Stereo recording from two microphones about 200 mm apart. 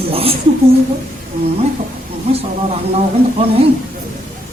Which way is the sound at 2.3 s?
30° right (ahead or behind).